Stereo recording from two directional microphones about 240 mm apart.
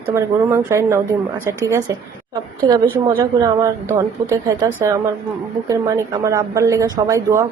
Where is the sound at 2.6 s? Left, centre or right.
Centre.